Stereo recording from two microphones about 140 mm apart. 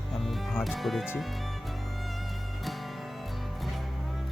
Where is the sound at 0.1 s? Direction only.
Centre (ahead or behind).